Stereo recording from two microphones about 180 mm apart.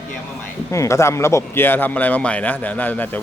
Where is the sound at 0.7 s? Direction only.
15° left (ahead or behind).